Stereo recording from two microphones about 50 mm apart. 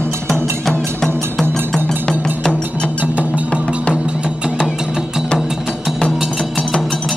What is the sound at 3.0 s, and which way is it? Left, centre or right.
Music, right.